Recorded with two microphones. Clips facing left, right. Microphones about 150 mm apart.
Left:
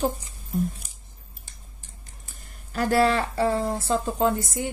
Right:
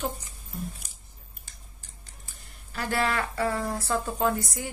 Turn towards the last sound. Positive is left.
turn(degrees=25)  # may be behind; listen again after turning